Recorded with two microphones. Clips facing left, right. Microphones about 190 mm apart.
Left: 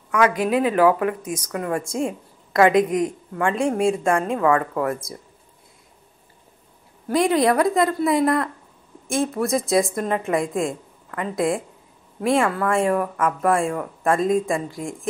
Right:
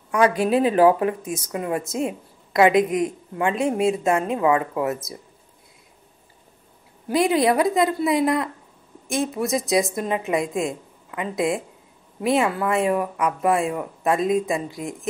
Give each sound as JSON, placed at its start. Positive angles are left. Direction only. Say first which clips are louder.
{"t": 0.1, "sound": "speech", "louder": "right 1 dB", "side_deg": -30}
{"t": 7.7, "sound": "a woman's voice", "louder": "left 1 dB", "side_deg": -20}